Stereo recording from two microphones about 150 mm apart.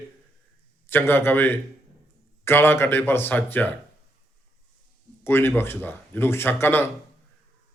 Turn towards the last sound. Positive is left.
turn(degrees=15)  # may be behind; listen again after turning